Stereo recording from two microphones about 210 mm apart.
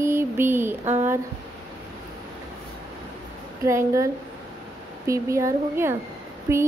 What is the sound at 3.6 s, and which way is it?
Speech, 15° right (ahead or behind).